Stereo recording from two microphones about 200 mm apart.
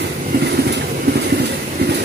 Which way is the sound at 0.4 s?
55° right (ahead or behind).